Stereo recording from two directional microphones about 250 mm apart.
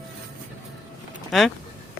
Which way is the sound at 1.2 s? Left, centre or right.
Centre.